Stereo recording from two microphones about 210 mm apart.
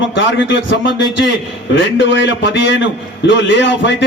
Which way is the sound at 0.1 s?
60° left (ahead or behind).